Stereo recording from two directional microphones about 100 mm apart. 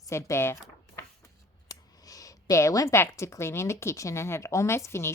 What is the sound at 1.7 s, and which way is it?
A woman's voice, 35° left (ahead or behind).